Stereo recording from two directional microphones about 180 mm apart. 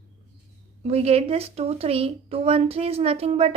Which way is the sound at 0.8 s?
35° right (ahead or behind).